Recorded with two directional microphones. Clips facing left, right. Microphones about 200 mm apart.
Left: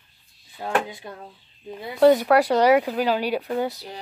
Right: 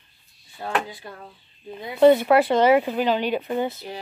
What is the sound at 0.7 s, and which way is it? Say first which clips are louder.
Speech: left 2 dB; 20° left (ahead or behind).